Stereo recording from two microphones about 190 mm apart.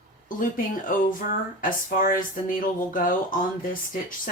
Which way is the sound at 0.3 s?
45° left (ahead or behind).